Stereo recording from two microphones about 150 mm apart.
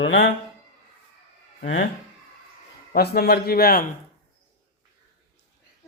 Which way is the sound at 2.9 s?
90° left.